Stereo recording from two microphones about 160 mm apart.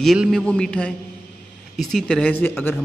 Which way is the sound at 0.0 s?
Centre (ahead or behind).